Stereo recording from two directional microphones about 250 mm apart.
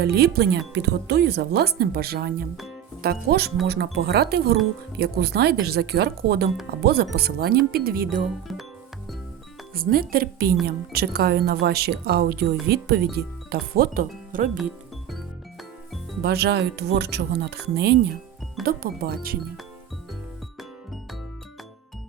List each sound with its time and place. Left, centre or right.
0.0 s speech: right
9.7 s speech: right
16.2 s speech: right
20.6 s music: centre